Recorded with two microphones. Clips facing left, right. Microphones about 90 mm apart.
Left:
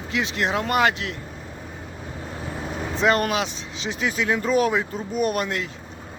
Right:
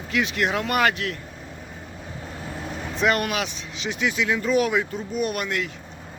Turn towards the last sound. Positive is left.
turn(degrees=30)  # may be behind; listen again after turning